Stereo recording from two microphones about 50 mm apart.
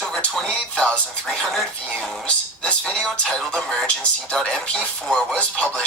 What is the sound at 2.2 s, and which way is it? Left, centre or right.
Speech, left.